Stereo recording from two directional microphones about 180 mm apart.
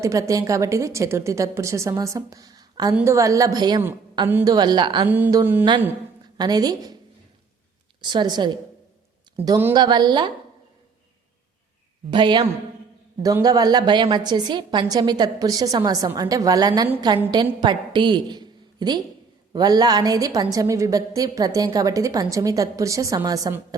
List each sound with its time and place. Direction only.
0.0 s a woman's voice: 15° right (ahead or behind)
4.3 s a woman's voice: 10° right (ahead or behind)
4.5 s a woman's voice: 25° right (ahead or behind)
5.0 s a woman's voice: 10° right (ahead or behind)
8.0 s a woman's voice: 25° right (ahead or behind)
12.1 s a woman's voice: 25° right (ahead or behind)